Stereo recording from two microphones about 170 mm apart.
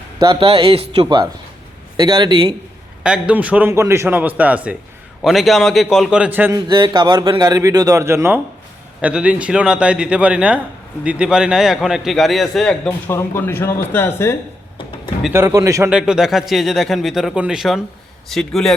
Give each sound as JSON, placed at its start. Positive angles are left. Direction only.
{"t": 0.2, "sound": "speech", "side_deg": -30}
{"t": 2.0, "sound": "a man's voice", "side_deg": -25}
{"t": 3.0, "sound": "a man's voice", "side_deg": -5}
{"t": 6.7, "sound": "a man's voice", "side_deg": -25}
{"t": 13.1, "sound": "speech", "side_deg": 15}
{"t": 15.3, "sound": "a man's voice", "side_deg": -15}
{"t": 15.9, "sound": "a man's voice", "side_deg": -5}